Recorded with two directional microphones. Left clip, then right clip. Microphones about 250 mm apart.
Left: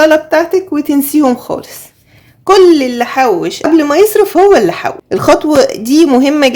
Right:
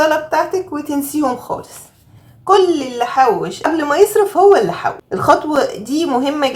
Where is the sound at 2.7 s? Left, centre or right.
Left.